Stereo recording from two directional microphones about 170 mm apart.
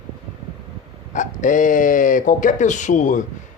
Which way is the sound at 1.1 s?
50° left (ahead or behind).